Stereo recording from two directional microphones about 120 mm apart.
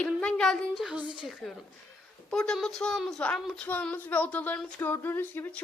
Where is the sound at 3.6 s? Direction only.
15° left (ahead or behind).